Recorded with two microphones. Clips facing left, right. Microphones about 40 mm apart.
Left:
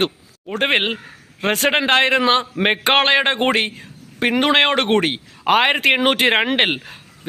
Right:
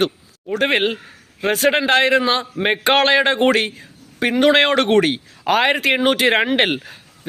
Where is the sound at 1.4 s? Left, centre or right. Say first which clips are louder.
Right 1 dB; left.